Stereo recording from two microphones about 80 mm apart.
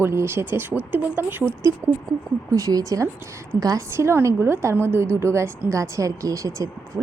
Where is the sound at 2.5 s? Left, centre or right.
Right.